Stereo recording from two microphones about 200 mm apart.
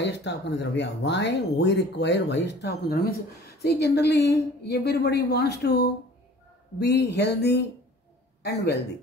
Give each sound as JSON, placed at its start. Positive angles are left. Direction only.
{"t": 0.0, "sound": "speech", "side_deg": 60}